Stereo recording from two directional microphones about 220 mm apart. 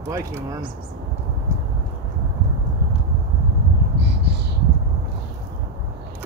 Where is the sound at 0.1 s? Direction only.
15° right (ahead or behind).